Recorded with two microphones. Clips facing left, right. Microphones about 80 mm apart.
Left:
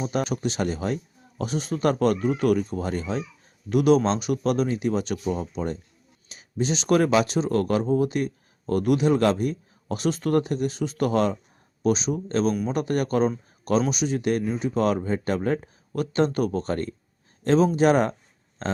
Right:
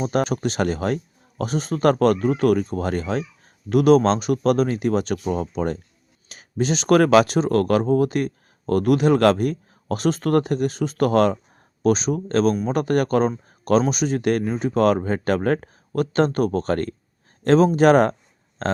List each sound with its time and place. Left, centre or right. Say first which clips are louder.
0.0 s speech: right 4 dB; right
1.4 s speech: right 4 dB; right